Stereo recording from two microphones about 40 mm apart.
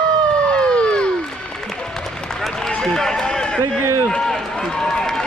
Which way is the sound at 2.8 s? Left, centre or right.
Centre.